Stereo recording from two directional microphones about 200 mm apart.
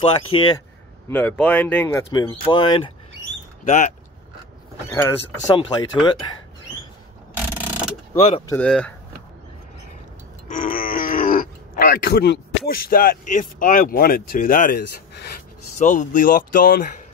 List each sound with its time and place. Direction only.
0.0 s speech: 25° left (ahead or behind)
1.1 s speech: 5° left (ahead or behind)
2.4 s speech: 25° left (ahead or behind)
3.6 s speech: 40° left (ahead or behind)
4.8 s speech: 10° left (ahead or behind)
5.5 s speech: 20° left (ahead or behind)
8.5 s speech: 5° left (ahead or behind)
10.5 s speech: 45° left (ahead or behind)
15.8 s speech: 40° left (ahead or behind)